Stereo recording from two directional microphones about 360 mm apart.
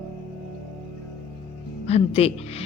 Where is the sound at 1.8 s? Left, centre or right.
Centre.